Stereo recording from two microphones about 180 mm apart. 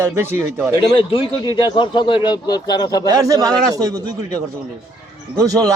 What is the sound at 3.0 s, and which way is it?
Speech, 20° right (ahead or behind).